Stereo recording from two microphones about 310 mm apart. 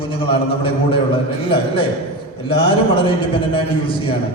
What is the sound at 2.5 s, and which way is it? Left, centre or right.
Speech, centre.